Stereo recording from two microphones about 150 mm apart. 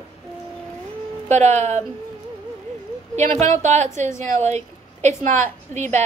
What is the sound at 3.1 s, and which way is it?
Speech, 50° right (ahead or behind).